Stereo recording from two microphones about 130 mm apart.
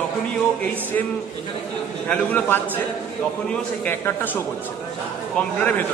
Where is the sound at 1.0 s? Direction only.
15° left (ahead or behind).